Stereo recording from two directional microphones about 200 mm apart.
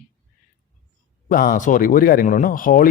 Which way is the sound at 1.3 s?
45° left (ahead or behind).